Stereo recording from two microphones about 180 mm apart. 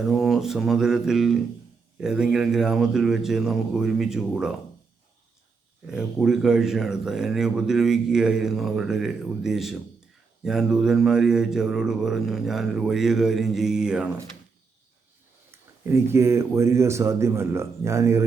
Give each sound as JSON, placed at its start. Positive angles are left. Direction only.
{"t": 0.1, "sound": "speech", "side_deg": 0}
{"t": 5.9, "sound": "speech", "side_deg": -5}
{"t": 15.5, "sound": "a man's voice", "side_deg": -15}